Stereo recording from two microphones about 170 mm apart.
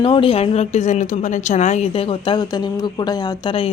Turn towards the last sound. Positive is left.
turn(degrees=30)  # may be behind; listen again after turning